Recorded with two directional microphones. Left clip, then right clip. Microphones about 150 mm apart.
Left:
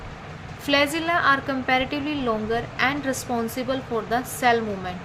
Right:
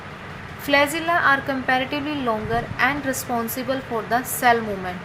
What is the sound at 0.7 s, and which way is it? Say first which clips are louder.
A woman's voice: right 2 dB; 20° left (ahead or behind).